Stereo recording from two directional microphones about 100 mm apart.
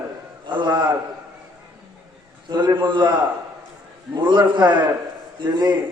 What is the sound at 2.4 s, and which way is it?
A man's voice, 50° right (ahead or behind).